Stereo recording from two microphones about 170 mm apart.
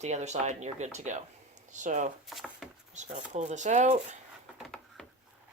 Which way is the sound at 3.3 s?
45° right (ahead or behind).